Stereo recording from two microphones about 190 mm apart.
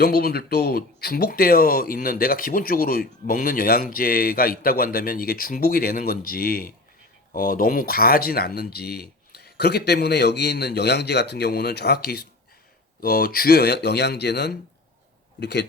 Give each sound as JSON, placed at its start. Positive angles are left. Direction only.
{"t": 0.0, "sound": "speech", "side_deg": 55}